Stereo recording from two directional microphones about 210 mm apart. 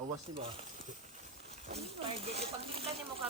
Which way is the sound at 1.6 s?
30° right (ahead or behind).